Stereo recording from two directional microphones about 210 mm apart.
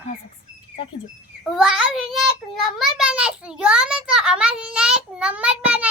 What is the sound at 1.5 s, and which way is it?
Child singing, 5° right (ahead or behind).